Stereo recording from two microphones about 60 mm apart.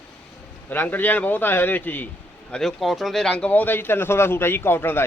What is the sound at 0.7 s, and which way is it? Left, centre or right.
A man's voice, left.